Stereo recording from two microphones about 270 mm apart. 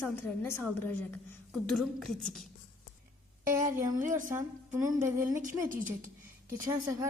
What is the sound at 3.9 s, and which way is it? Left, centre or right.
A woman's voice, right.